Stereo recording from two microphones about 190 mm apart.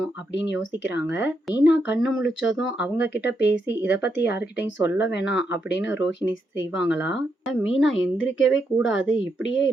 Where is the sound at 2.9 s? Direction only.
60° left (ahead or behind).